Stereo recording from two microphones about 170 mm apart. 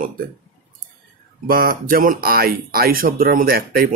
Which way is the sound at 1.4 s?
60° right (ahead or behind).